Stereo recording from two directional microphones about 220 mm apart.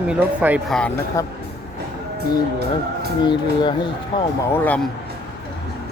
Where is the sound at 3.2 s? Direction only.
20° left (ahead or behind).